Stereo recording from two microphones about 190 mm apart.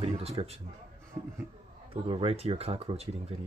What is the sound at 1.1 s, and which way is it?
Speech, 15° right (ahead or behind).